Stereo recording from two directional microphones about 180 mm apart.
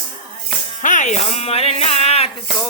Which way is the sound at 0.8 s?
45° left (ahead or behind).